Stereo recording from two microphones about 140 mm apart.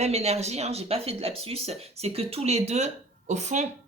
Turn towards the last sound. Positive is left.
turn(degrees=-55)  # may be behind; listen again after turning